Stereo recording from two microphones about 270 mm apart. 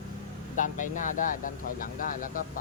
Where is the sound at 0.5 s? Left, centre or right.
Left.